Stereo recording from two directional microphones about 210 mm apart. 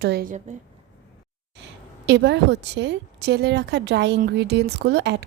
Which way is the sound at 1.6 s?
55° right (ahead or behind).